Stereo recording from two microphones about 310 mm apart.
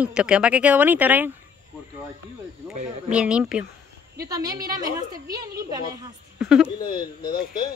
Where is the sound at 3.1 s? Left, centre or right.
Centre.